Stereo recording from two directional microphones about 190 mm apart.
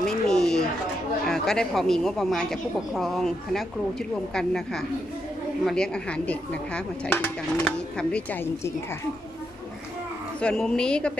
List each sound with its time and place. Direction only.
0.0 s a sound: 5° left (ahead or behind)
1.2 s speech: centre (ahead or behind)
4.3 s speech: centre (ahead or behind)
10.4 s speech: 5° left (ahead or behind)